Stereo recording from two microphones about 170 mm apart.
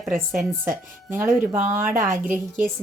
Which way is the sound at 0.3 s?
5° right (ahead or behind).